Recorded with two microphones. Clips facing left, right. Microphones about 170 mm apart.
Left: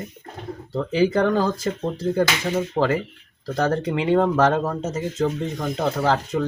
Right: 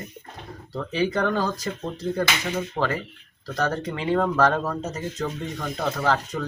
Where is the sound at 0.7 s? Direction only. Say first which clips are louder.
Left 5 dB; 30° left (ahead or behind).